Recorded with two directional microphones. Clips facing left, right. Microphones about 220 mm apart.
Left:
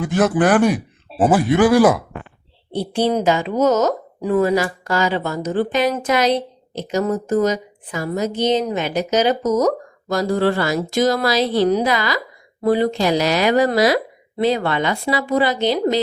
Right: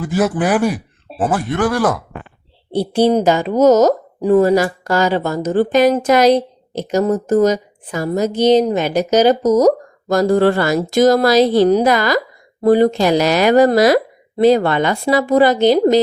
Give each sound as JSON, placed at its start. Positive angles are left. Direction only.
{"t": 0.0, "sound": "speech", "side_deg": -5}
{"t": 1.2, "sound": "speech", "side_deg": 5}
{"t": 2.7, "sound": "a woman's voice", "side_deg": -40}
{"t": 10.2, "sound": "a woman's voice", "side_deg": -50}